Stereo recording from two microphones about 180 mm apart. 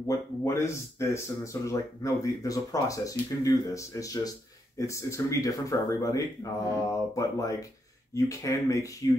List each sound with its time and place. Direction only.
0.0 s speech: 15° left (ahead or behind)